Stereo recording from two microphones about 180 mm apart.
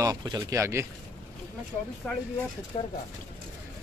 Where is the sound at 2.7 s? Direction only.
35° left (ahead or behind).